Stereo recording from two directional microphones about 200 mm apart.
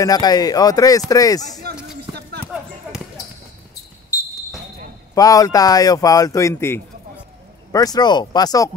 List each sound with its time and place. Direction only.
0.0 s speech: 20° left (ahead or behind)
1.6 s a sound: 55° right (ahead or behind)
2.4 s basketball bounce: 5° right (ahead or behind)
5.1 s speech: 20° left (ahead or behind)